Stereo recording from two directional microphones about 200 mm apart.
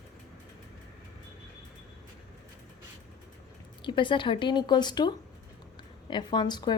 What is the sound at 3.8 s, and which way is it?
A woman's voice, 25° left (ahead or behind).